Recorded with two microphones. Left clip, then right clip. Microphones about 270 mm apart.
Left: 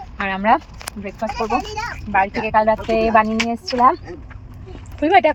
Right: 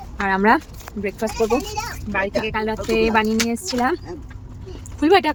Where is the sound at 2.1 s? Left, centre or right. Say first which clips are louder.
Left 5 dB; centre.